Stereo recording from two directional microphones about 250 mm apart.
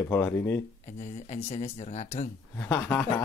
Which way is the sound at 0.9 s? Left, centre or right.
Left.